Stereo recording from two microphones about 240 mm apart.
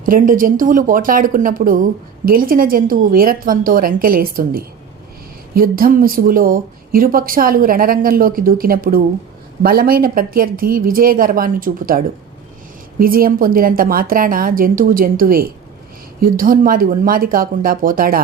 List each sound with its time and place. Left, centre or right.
0.0 s speech: right